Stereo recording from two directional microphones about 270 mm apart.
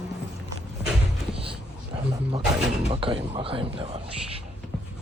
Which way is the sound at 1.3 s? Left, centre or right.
Right.